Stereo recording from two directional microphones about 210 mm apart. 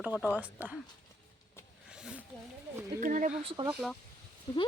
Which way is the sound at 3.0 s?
40° right (ahead or behind).